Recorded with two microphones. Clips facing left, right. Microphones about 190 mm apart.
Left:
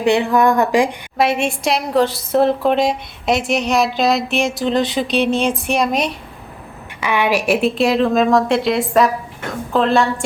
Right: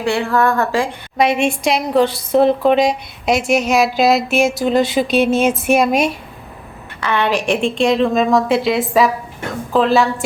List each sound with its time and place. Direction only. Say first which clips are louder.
0.0 s a woman's voice: left 2 dB; 20° left (ahead or behind)
1.2 s a woman's voice: right 2 dB; centre (ahead or behind)
7.0 s a woman's voice: even; 10° left (ahead or behind)